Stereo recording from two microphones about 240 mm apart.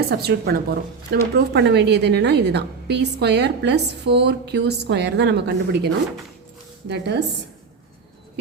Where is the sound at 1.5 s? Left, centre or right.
Right.